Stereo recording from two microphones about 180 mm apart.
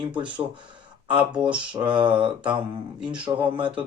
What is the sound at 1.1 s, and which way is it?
Speech, 5° right (ahead or behind).